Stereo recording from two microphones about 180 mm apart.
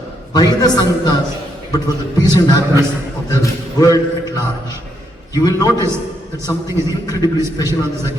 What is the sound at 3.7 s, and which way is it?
A man's voice, 20° left (ahead or behind).